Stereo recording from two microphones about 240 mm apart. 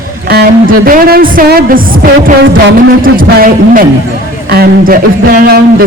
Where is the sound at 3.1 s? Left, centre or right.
Right.